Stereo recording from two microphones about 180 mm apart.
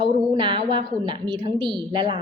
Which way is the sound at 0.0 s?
25° right (ahead or behind).